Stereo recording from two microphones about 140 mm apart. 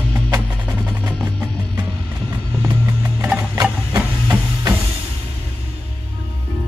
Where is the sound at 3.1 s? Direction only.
15° right (ahead or behind).